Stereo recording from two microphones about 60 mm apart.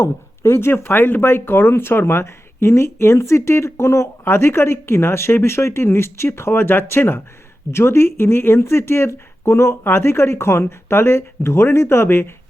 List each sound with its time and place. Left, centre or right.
0.0 s speech: left